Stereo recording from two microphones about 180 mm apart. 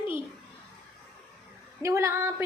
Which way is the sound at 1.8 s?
15° right (ahead or behind).